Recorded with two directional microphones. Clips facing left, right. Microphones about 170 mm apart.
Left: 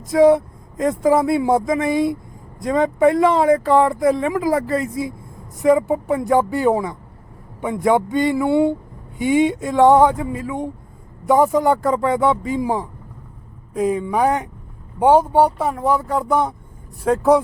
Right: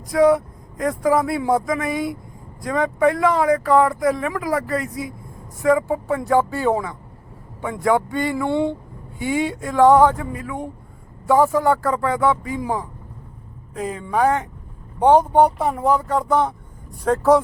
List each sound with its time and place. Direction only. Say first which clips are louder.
0.1 s speech: left 3 dB; 25° left (ahead or behind)
8.4 s speech: left 4 dB; 10° left (ahead or behind)
9.1 s speech: left 6 dB; 20° left (ahead or behind)